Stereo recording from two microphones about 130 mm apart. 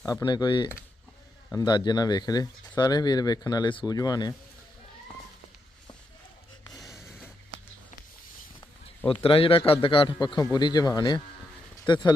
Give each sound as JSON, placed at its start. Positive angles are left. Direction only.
{"t": 0.0, "sound": "speech", "side_deg": 30}
{"t": 9.0, "sound": "speech", "side_deg": 45}